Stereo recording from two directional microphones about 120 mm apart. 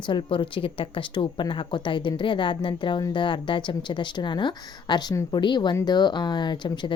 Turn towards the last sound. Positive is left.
turn(degrees=40)  # may be behind; listen again after turning